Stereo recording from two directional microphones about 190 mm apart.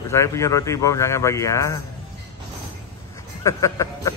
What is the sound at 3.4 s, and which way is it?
Music, 15° left (ahead or behind).